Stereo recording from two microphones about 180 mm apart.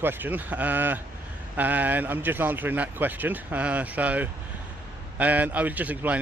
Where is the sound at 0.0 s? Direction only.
10° right (ahead or behind).